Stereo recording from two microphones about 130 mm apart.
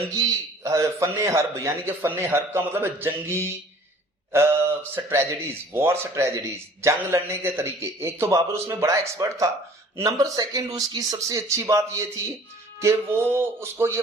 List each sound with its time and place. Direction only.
0.2 s a man's voice: 25° right (ahead or behind)